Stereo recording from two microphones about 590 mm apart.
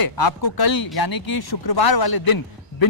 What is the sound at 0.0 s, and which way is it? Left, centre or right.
A man's voice, left.